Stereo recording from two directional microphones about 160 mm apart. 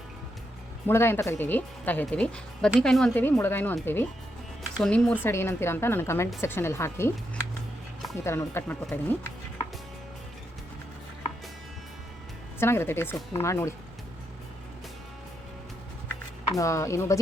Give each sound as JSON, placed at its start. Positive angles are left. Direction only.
{"t": 0.9, "sound": "speech", "side_deg": 15}
{"t": 8.2, "sound": "speech", "side_deg": 15}
{"t": 12.5, "sound": "speech", "side_deg": 15}
{"t": 16.6, "sound": "speech", "side_deg": 20}